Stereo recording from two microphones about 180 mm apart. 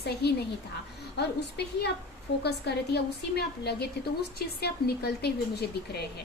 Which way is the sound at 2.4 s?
65° left (ahead or behind).